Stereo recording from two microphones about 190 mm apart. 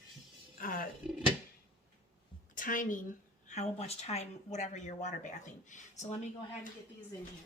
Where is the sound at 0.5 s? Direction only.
50° left (ahead or behind).